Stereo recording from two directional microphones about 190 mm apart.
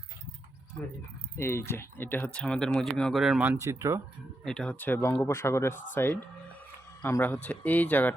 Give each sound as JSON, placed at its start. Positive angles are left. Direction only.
{"t": 1.4, "sound": "speech", "side_deg": 15}
{"t": 4.4, "sound": "speech", "side_deg": 5}